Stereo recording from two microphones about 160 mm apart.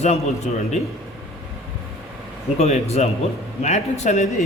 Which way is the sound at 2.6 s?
45° left (ahead or behind).